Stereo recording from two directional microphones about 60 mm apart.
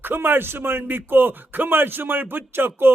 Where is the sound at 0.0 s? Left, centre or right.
Right.